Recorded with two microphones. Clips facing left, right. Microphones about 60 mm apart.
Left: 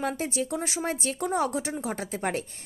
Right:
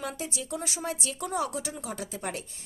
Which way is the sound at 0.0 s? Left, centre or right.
Left.